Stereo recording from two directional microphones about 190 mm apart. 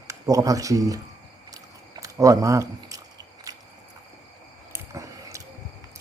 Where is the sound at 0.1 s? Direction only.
20° right (ahead or behind).